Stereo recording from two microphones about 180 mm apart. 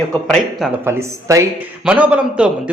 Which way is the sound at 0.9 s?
15° right (ahead or behind).